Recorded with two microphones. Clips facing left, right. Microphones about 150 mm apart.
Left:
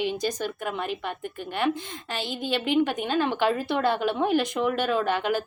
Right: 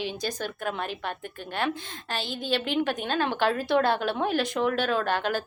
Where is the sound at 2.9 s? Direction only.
10° left (ahead or behind).